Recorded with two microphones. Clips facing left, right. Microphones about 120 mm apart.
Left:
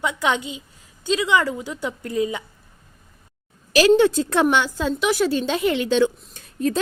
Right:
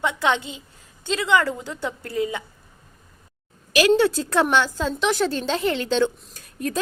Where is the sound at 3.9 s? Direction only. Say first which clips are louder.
Left 2 dB; 20° left (ahead or behind).